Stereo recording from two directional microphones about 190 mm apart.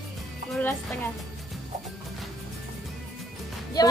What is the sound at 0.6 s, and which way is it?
Speech, 10° left (ahead or behind).